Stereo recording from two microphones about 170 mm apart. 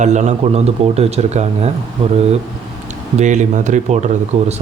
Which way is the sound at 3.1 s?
45° right (ahead or behind).